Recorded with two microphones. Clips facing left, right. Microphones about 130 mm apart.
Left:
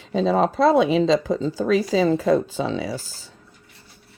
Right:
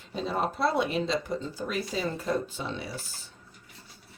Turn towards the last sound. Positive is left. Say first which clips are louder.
# left 9 dB
turn(degrees=90)